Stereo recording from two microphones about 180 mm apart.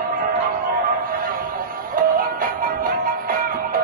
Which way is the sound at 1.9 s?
50° right (ahead or behind).